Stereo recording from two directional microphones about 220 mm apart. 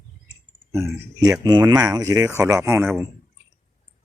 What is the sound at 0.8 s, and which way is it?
Speech, 15° right (ahead or behind).